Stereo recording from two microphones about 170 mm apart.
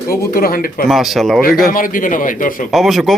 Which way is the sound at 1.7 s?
55° left (ahead or behind).